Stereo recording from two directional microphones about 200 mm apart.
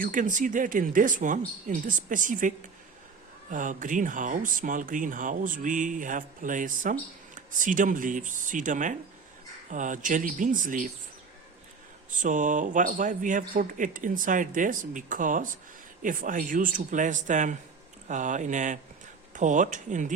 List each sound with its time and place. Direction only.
0.0 s speech: 40° right (ahead or behind)
3.5 s speech: 40° right (ahead or behind)
12.1 s speech: 40° right (ahead or behind)